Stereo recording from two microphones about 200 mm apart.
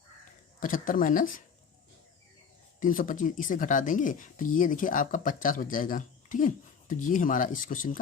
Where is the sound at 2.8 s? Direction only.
40° left (ahead or behind).